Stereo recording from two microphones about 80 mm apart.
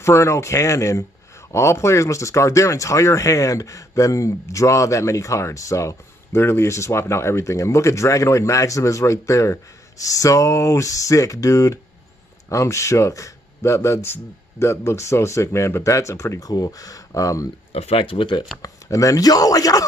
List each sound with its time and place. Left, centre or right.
0.0 s speech: left
18.0 s speech: left
18.6 s speech: left